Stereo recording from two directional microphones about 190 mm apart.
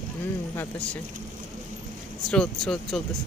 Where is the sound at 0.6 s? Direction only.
5° left (ahead or behind).